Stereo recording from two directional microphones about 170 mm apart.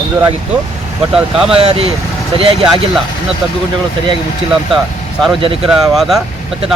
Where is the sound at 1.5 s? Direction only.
35° right (ahead or behind).